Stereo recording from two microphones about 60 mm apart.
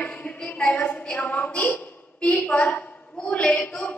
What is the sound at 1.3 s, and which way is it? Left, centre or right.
A woman's voice, left.